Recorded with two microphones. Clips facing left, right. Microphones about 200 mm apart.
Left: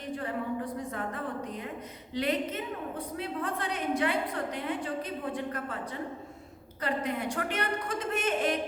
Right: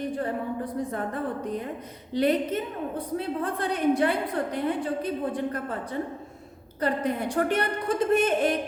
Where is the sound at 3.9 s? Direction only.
35° right (ahead or behind).